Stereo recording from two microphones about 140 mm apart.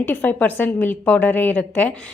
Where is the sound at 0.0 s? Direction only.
15° left (ahead or behind).